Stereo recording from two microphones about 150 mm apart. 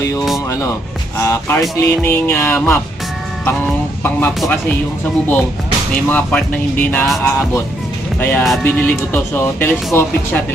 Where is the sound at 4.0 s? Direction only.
15° left (ahead or behind).